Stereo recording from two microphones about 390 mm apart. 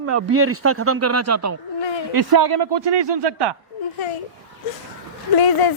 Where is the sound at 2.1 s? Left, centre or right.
Right.